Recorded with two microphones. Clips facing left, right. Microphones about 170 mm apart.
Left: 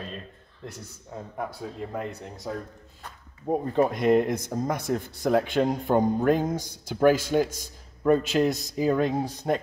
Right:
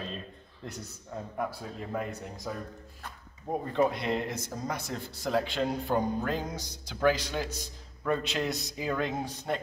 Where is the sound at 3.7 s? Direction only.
45° left (ahead or behind).